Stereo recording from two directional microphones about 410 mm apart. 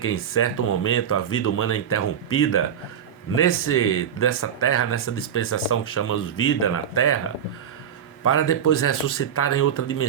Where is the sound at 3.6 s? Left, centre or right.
Left.